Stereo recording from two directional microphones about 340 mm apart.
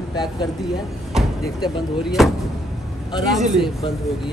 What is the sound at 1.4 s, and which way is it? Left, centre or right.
Speech, centre.